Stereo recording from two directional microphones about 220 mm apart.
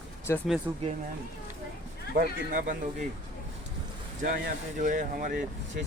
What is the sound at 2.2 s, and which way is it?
Speech, 40° right (ahead or behind).